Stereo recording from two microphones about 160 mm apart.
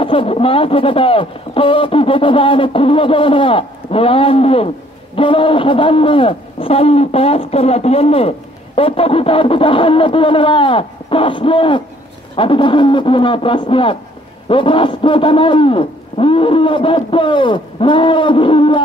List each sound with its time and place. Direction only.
0.0 s a man's voice: 35° left (ahead or behind)